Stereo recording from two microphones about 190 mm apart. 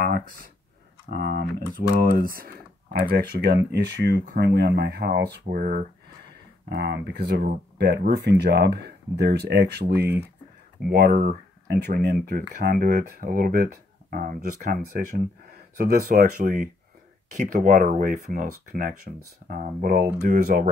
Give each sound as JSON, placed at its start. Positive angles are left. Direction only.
{"t": 0.0, "sound": "a sound", "side_deg": -50}
{"t": 1.1, "sound": "speech", "side_deg": -60}
{"t": 6.7, "sound": "speech", "side_deg": -60}
{"t": 11.6, "sound": "speech", "side_deg": -55}